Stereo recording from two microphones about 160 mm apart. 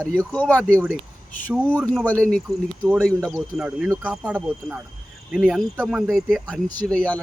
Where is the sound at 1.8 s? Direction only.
5° left (ahead or behind).